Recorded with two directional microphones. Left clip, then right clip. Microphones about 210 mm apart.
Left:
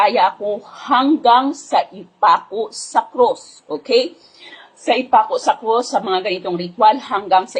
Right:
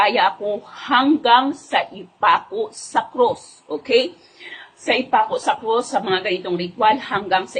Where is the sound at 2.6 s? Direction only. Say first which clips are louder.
Left 3 dB; 10° left (ahead or behind).